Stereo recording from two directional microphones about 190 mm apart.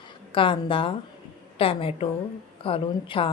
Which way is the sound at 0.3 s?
25° left (ahead or behind).